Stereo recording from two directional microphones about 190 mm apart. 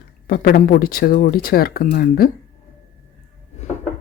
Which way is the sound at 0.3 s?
50° left (ahead or behind).